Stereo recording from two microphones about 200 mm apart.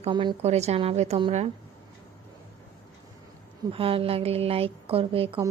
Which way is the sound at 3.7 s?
30° right (ahead or behind).